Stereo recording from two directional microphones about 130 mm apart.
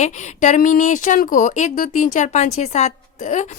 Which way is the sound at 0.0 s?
65° left (ahead or behind).